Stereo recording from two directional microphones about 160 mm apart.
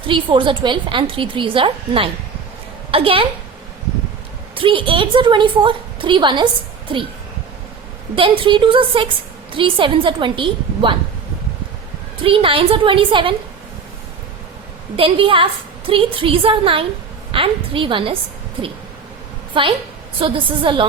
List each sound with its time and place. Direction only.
0.1 s a woman's voice: 30° right (ahead or behind)
4.5 s a woman's voice: 35° right (ahead or behind)
8.1 s a woman's voice: 35° right (ahead or behind)
12.2 s a woman's voice: 35° right (ahead or behind)
14.9 s a woman's voice: 35° right (ahead or behind)
19.6 s a woman's voice: 30° right (ahead or behind)